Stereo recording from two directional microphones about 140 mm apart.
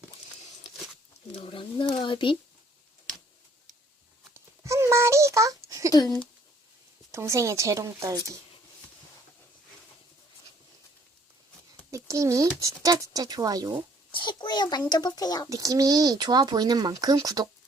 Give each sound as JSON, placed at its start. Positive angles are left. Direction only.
{"t": 1.4, "sound": "speech", "side_deg": 40}
{"t": 4.4, "sound": "a sound", "side_deg": -20}
{"t": 5.9, "sound": "a child's voice", "side_deg": 30}
{"t": 7.1, "sound": "speech", "side_deg": -20}
{"t": 11.9, "sound": "speech", "side_deg": -20}
{"t": 14.1, "sound": "a child's voice", "side_deg": 35}
{"t": 15.4, "sound": "speech", "side_deg": -25}